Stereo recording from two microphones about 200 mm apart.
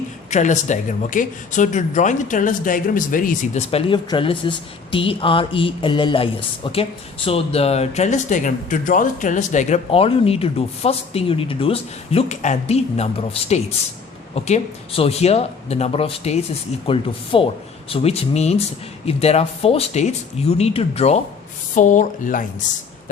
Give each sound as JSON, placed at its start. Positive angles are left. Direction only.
{"t": 0.3, "sound": "speech", "side_deg": 35}